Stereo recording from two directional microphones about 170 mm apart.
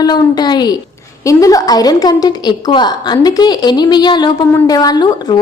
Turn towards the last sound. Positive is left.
turn(degrees=25)  # may be behind; listen again after turning